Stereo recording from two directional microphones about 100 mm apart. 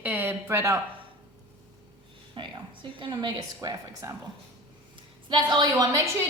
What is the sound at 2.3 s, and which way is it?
A woman's voice, 55° right (ahead or behind).